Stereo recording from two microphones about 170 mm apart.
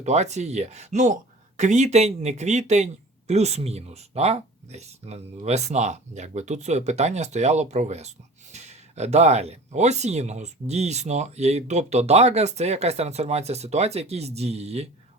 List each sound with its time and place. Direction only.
0.0 s speech: 40° right (ahead or behind)